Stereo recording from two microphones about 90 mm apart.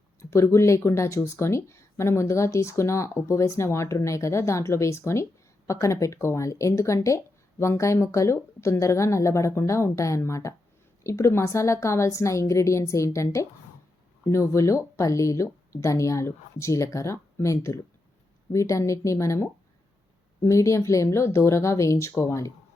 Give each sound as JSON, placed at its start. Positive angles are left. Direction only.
{"t": 0.2, "sound": "speech", "side_deg": 30}